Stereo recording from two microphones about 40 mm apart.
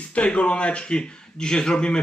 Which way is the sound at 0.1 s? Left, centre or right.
Left.